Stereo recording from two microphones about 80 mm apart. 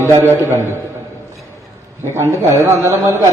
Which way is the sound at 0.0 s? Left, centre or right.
Right.